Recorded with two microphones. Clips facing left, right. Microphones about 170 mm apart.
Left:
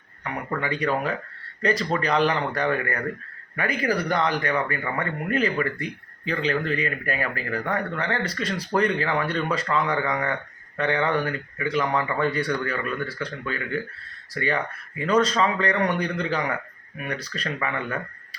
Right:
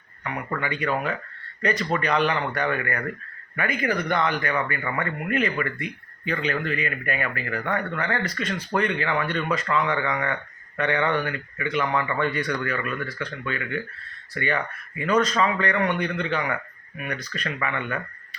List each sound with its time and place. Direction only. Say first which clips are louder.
0.6 s speech: left 2 dB; 35° left (ahead or behind)